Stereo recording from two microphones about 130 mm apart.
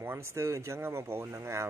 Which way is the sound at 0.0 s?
20° right (ahead or behind).